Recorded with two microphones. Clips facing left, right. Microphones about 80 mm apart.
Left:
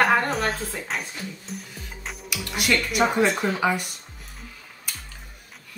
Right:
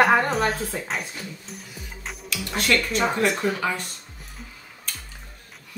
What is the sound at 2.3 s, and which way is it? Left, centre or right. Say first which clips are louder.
Music: right 1 dB; centre.